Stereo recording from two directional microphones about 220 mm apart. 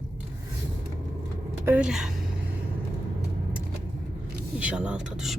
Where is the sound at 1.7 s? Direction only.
5° right (ahead or behind).